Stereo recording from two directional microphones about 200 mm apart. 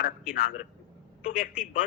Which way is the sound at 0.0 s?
45° left (ahead or behind).